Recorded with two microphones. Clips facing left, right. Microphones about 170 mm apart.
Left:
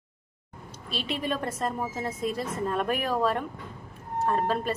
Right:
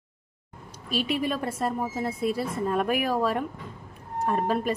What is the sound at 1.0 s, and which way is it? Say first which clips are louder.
A woman's voice: right 3 dB; 10° right (ahead or behind).